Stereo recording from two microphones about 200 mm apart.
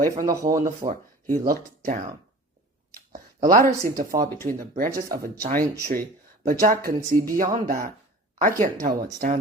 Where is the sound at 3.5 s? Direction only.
45° right (ahead or behind).